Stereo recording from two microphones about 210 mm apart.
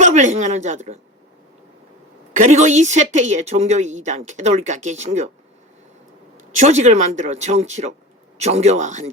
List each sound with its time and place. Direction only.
0.0 s a woman's voice: 35° right (ahead or behind)
2.3 s a woman's voice: 35° right (ahead or behind)
6.6 s a woman's voice: 30° right (ahead or behind)